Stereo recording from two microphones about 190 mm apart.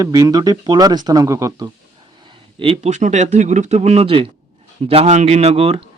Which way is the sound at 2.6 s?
35° right (ahead or behind).